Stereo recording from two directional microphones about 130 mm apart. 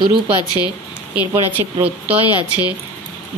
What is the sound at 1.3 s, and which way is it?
Speech, 15° right (ahead or behind).